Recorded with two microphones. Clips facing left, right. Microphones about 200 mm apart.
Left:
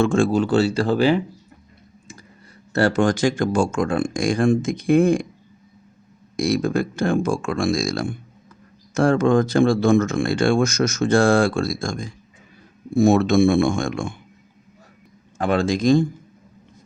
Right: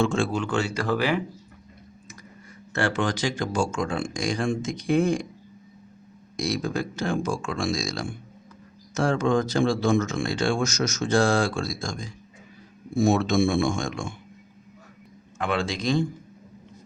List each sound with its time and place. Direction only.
0.0 s speech: 50° left (ahead or behind); by 1.2 s 30° left (ahead or behind)
2.7 s speech: 40° left (ahead or behind)
6.3 s speech: 55° left (ahead or behind)
15.4 s speech: 40° left (ahead or behind)